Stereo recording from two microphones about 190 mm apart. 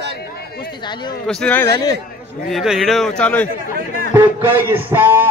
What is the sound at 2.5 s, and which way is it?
Speech, centre (ahead or behind).